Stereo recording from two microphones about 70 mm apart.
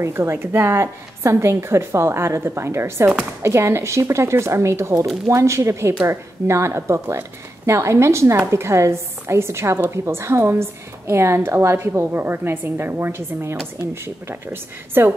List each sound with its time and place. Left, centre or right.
0.0 s a woman's voice: right